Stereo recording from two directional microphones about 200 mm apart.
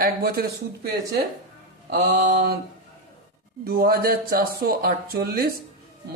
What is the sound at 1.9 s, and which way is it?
Mantra, 55° right (ahead or behind).